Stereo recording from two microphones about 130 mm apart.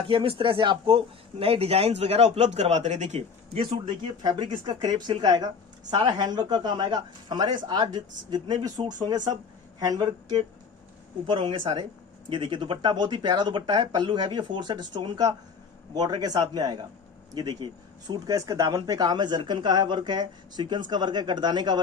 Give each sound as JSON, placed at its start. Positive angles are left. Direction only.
{"t": 0.1, "sound": "speech", "side_deg": -45}
{"t": 3.6, "sound": "speech", "side_deg": -35}